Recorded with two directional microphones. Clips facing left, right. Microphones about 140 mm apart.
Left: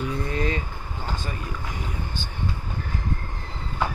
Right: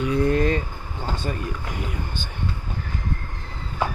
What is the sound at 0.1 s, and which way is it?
Vehicle, 55° right (ahead or behind).